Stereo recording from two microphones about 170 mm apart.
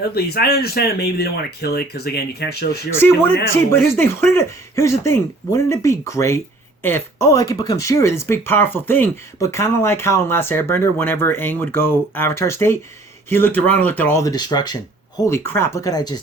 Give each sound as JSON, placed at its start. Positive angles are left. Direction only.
{"t": 0.0, "sound": "speech", "side_deg": 70}
{"t": 3.0, "sound": "speech", "side_deg": 10}